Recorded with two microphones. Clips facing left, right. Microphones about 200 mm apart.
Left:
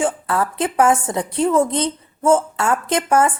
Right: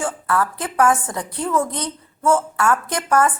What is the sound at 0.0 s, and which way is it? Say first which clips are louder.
A woman's voice: left 2 dB; 20° left (ahead or behind).